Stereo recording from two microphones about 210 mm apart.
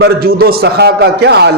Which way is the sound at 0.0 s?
45° right (ahead or behind).